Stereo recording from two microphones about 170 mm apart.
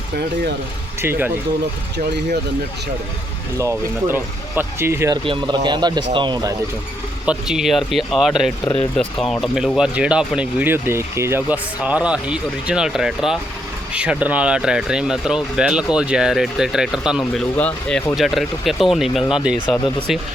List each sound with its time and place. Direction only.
1.0 s speech: 10° right (ahead or behind)
3.6 s speech: 15° right (ahead or behind)
5.2 s speech: 30° right (ahead or behind)
7.3 s speech: 5° right (ahead or behind)
8.6 s speech: 35° left (ahead or behind)
9.0 s speech: 5° left (ahead or behind)